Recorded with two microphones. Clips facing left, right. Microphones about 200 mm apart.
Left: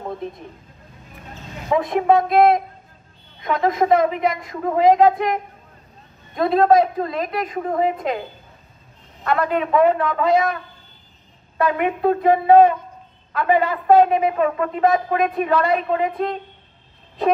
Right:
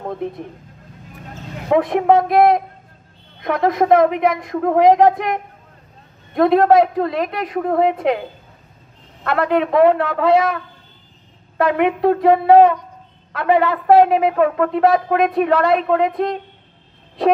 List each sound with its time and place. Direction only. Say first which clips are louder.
1.7 s a woman's voice: right 3 dB; 65° right (ahead or behind)
3.4 s a woman's voice: right 3 dB; 65° right (ahead or behind)
9.2 s speech: right 3 dB; 70° right (ahead or behind)